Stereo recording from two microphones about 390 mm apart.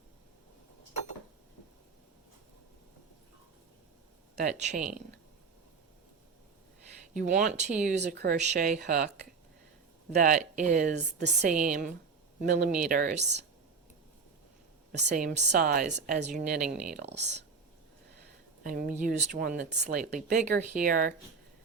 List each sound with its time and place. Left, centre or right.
4.4 s speech: centre
7.2 s speech: centre
10.2 s speech: centre
14.9 s speech: centre
16.6 s speech: centre
17.0 s speech: right
18.6 s speech: right